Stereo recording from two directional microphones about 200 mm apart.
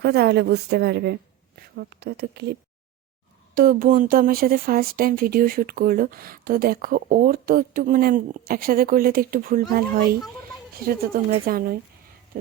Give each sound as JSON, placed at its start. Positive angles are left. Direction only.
{"t": 0.0, "sound": "a woman's voice", "side_deg": -55}
{"t": 3.5, "sound": "speech", "side_deg": -45}